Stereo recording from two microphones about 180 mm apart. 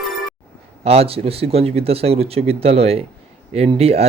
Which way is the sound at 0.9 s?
35° right (ahead or behind).